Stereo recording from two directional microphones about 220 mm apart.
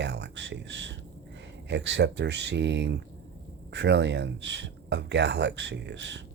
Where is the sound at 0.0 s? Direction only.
55° right (ahead or behind).